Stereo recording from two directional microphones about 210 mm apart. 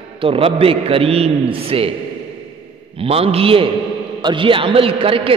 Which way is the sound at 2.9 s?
25° right (ahead or behind).